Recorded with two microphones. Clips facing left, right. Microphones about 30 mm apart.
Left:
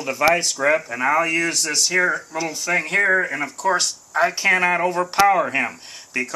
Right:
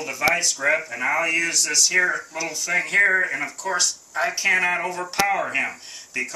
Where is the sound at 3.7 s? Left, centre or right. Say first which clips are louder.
Left 2 dB; left.